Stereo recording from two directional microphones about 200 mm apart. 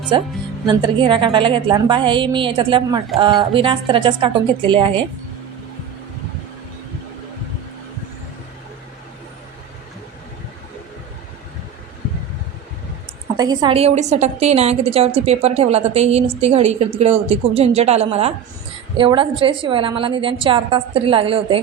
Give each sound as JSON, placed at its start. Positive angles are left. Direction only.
{"t": 0.7, "sound": "a woman's voice", "side_deg": -25}
{"t": 13.3, "sound": "a woman's voice", "side_deg": -20}